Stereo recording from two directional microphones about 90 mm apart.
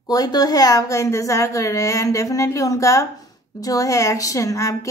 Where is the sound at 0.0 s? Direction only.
45° left (ahead or behind).